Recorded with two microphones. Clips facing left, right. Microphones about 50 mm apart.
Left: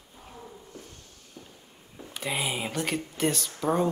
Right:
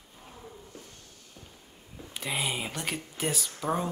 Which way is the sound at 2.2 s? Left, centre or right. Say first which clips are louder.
Left 2 dB; centre.